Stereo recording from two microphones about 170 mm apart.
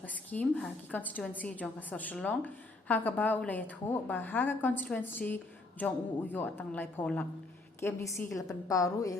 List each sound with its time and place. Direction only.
0.3 s a woman's voice: 10° left (ahead or behind)